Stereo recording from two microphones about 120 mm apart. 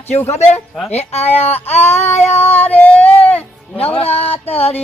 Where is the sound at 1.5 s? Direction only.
20° left (ahead or behind).